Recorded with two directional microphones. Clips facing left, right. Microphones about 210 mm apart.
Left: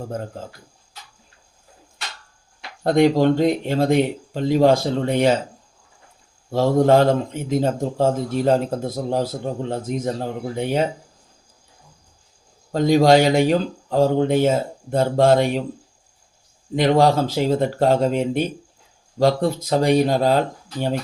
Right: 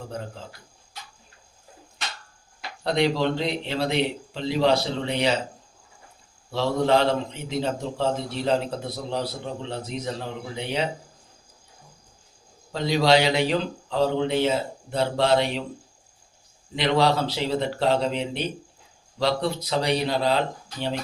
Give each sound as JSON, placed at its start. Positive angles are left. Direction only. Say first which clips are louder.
{"t": 0.1, "sound": "a man's voice", "louder": "left 5 dB", "side_deg": 45}
{"t": 2.8, "sound": "a man's voice", "louder": "left 7 dB", "side_deg": 50}
{"t": 6.5, "sound": "a man's voice", "louder": "left 6 dB", "side_deg": 45}
{"t": 12.7, "sound": "a man's voice", "louder": "left 6 dB", "side_deg": 45}
{"t": 16.7, "sound": "a man's voice", "louder": "left 5 dB", "side_deg": 45}